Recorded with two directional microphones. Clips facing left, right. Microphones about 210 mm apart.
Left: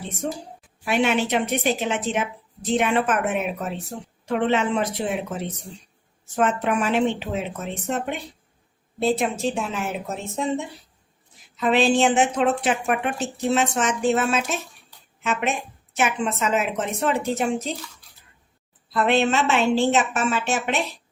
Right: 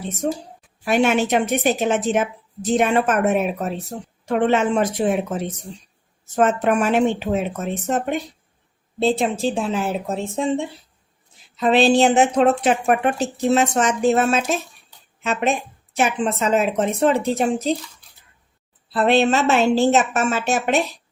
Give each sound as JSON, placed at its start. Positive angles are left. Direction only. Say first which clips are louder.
{"t": 0.9, "sound": "a woman's voice", "louder": "right 4 dB", "side_deg": -45}
{"t": 6.3, "sound": "a woman's voice", "louder": "right 4 dB", "side_deg": -45}
{"t": 9.0, "sound": "a woman's voice", "louder": "right 3 dB", "side_deg": -25}
{"t": 18.9, "sound": "a woman's voice", "louder": "right 3 dB", "side_deg": -35}